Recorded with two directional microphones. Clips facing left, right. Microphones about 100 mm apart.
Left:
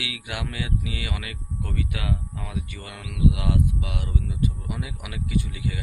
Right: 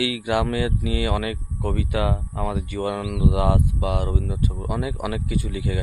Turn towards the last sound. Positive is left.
turn(degrees=-40)  # may be behind; listen again after turning